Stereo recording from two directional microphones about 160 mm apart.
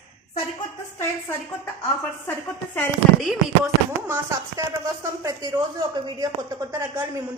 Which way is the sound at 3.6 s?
15° right (ahead or behind).